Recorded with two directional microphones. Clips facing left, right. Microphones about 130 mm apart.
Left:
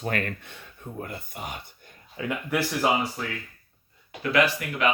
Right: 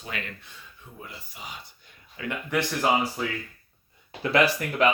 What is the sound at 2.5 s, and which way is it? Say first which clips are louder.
Speech: even; 5° left (ahead or behind).